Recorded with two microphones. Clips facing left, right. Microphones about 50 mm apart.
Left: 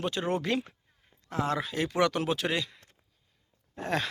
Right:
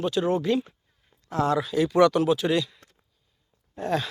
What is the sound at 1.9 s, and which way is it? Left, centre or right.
Speech, left.